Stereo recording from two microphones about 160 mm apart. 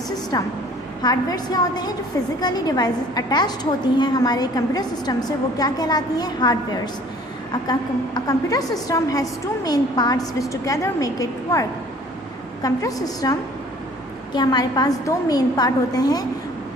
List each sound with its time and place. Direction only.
0.3 s a woman's voice: 25° left (ahead or behind)
12.6 s a woman's voice: 20° left (ahead or behind)
14.3 s a woman's voice: 25° left (ahead or behind)